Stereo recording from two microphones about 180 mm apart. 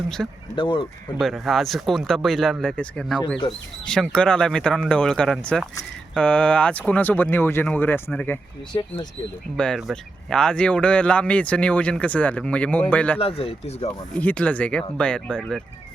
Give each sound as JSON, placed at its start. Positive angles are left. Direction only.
{"t": 0.2, "sound": "speech", "side_deg": -5}
{"t": 0.5, "sound": "speech", "side_deg": 25}
{"t": 1.2, "sound": "speech", "side_deg": 0}
{"t": 9.6, "sound": "speech", "side_deg": 0}
{"t": 13.1, "sound": "speech", "side_deg": 30}
{"t": 14.2, "sound": "speech", "side_deg": 10}